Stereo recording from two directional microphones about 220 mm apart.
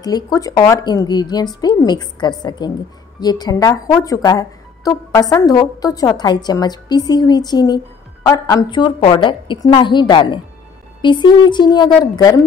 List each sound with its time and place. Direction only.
0.0 s a woman's voice: 15° left (ahead or behind)